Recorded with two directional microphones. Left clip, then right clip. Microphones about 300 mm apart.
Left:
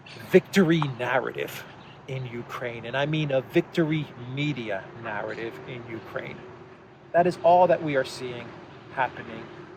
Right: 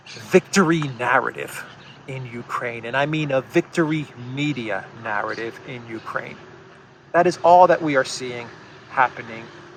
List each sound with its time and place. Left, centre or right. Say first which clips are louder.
0.3 s speech: right 3 dB; centre